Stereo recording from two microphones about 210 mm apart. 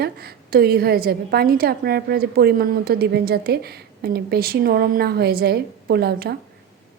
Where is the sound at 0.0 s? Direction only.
45° right (ahead or behind).